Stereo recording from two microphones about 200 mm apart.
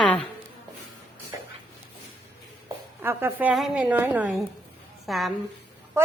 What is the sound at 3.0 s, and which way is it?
A woman's voice, 10° right (ahead or behind).